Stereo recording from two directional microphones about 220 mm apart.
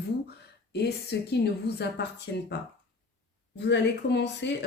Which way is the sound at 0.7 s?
50° left (ahead or behind).